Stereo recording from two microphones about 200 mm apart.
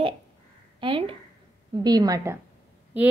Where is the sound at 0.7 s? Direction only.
25° right (ahead or behind).